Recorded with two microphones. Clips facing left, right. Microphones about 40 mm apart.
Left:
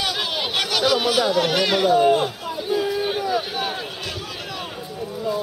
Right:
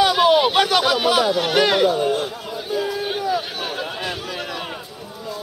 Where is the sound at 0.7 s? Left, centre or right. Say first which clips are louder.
Right 2 dB; right.